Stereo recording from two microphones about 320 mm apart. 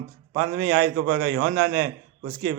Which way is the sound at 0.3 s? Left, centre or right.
Right.